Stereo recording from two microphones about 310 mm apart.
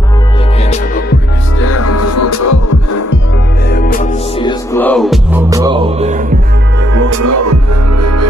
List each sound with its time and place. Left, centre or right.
1.6 s music: left
3.7 s music: left
4.4 s music: centre
5.5 s music: centre
7.1 s music: right